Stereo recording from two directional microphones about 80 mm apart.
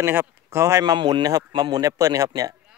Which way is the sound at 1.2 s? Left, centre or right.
Right.